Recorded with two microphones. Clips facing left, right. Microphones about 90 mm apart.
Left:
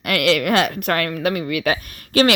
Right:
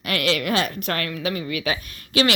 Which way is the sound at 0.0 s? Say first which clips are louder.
Left 5 dB; 55° left (ahead or behind).